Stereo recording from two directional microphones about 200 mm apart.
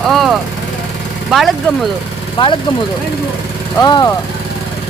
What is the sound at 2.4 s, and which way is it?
Speech, 25° left (ahead or behind).